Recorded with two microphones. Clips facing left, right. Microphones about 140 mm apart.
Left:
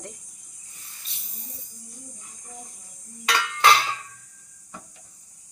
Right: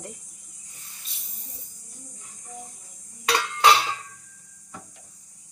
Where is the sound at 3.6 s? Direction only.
5° right (ahead or behind).